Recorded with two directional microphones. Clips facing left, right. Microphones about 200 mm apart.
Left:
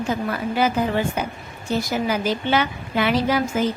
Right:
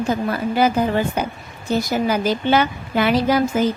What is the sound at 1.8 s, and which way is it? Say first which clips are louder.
A woman's voice: right 3 dB; 40° right (ahead or behind).